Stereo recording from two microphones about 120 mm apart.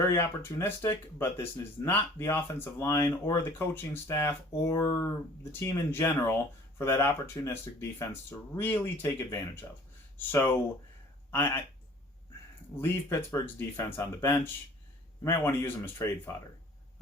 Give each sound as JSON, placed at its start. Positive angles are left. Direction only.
{"t": 0.1, "sound": "speech", "side_deg": 20}
{"t": 12.7, "sound": "speech", "side_deg": 20}